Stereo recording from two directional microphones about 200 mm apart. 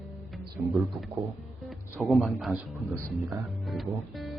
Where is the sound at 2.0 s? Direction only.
Centre (ahead or behind).